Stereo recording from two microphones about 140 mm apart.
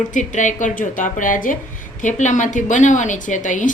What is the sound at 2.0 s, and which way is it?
A man's voice, 60° left (ahead or behind).